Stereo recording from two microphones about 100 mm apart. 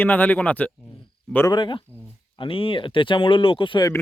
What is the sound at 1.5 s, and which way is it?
Speech, 55° left (ahead or behind).